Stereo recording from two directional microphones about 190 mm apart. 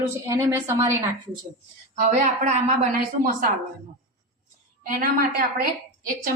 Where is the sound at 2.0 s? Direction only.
40° right (ahead or behind).